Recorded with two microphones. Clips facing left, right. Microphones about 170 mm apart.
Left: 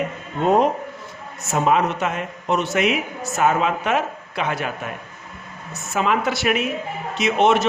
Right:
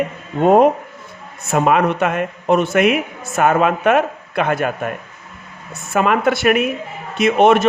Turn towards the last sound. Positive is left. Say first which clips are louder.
# right 5 dB
turn(degrees=-55)  # may be behind; listen again after turning